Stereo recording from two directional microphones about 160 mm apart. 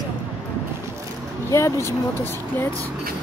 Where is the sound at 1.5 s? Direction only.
15° left (ahead or behind).